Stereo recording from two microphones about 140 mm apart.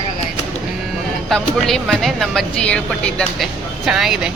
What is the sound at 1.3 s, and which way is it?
Speech, centre (ahead or behind).